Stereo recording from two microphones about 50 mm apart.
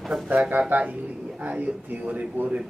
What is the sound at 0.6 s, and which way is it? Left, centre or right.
A man's voice, right.